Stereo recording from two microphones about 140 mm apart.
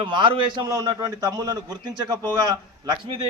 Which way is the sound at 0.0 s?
35° right (ahead or behind).